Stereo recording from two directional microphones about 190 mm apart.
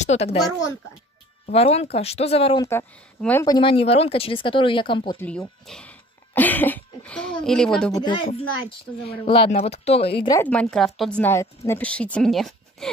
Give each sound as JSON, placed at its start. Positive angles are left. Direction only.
{"t": 0.0, "sound": "speech", "side_deg": 35}
{"t": 1.4, "sound": "a woman's voice", "side_deg": 30}
{"t": 2.6, "sound": "a woman's voice", "side_deg": 15}
{"t": 3.4, "sound": "speech", "side_deg": 25}
{"t": 5.1, "sound": "speech", "side_deg": 10}
{"t": 7.9, "sound": "a woman's voice", "side_deg": 25}
{"t": 10.4, "sound": "speech", "side_deg": 5}